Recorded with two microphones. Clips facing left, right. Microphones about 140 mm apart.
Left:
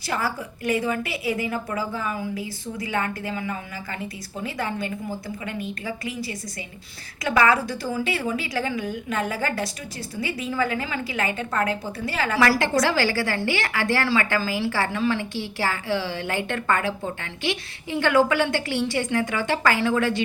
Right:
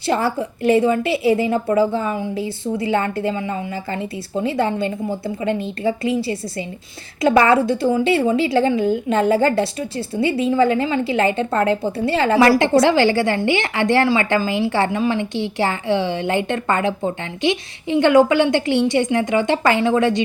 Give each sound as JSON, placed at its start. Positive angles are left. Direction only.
{"t": 0.1, "sound": "a woman's voice", "side_deg": -25}